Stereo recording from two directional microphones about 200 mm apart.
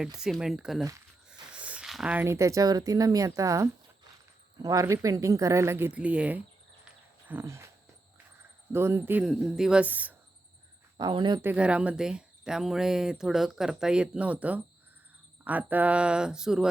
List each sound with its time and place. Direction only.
0.0 s speech: 5° right (ahead or behind)
8.7 s speech: 10° right (ahead or behind)
10.9 s speech: 20° right (ahead or behind)
11.4 s speech: 5° right (ahead or behind)